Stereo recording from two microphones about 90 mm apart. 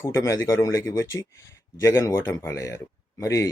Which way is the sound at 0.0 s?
35° left (ahead or behind).